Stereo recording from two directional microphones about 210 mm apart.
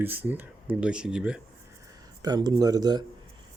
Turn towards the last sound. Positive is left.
turn(degrees=-20)  # may be behind; listen again after turning